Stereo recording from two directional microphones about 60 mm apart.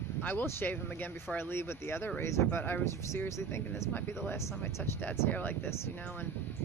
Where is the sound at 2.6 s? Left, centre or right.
Left.